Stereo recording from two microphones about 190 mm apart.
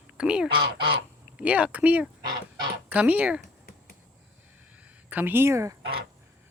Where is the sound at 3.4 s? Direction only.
50° left (ahead or behind).